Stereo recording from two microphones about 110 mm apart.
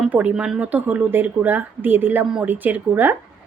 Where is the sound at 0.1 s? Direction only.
10° right (ahead or behind).